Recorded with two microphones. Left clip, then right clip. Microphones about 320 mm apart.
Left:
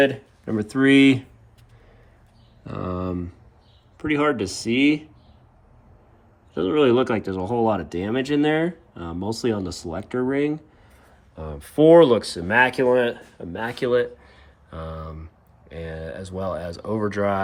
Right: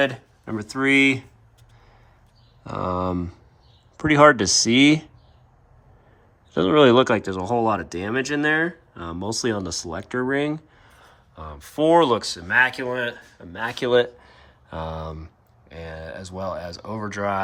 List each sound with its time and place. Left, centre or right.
0.0 s speech: centre
2.6 s speech: centre
6.5 s speech: centre